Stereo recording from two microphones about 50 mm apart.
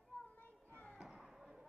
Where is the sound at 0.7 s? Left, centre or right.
Left.